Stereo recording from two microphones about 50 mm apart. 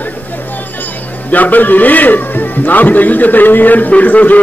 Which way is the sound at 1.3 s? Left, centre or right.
Left.